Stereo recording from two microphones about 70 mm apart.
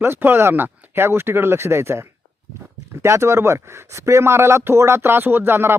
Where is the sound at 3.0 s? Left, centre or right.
Right.